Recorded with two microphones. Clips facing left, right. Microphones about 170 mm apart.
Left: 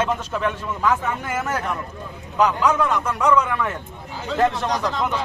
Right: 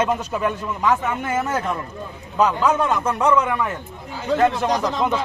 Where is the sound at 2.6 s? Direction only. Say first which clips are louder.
Right 1 dB; 25° right (ahead or behind).